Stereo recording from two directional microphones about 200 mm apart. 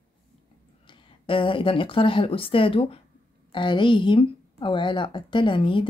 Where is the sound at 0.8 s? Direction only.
25° left (ahead or behind).